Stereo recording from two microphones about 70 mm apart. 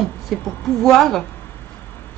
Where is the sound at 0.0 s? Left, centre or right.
Centre.